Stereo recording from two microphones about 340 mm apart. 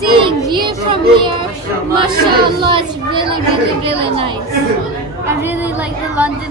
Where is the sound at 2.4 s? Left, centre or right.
Centre.